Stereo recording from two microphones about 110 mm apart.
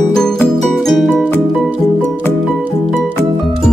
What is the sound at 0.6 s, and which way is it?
Music, centre (ahead or behind).